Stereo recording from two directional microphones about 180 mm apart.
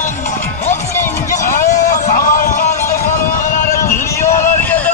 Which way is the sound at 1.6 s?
15° left (ahead or behind).